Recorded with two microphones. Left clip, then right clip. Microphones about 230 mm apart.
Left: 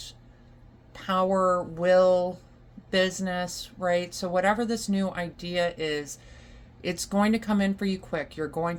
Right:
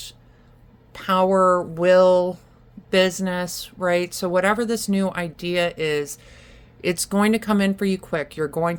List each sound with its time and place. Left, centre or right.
0.9 s speech: right